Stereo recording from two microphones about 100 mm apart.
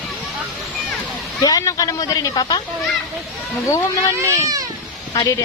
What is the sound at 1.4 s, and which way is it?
Speech, 35° left (ahead or behind).